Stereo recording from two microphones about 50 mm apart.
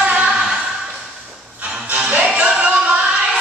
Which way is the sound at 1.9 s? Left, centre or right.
Right.